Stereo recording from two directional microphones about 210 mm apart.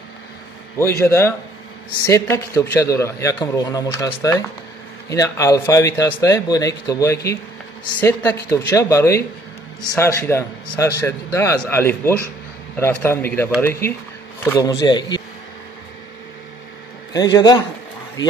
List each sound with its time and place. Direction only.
0.7 s a man's voice: 10° left (ahead or behind)
17.1 s a man's voice: 20° left (ahead or behind)